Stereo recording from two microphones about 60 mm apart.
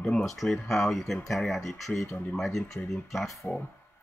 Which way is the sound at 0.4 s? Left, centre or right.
Centre.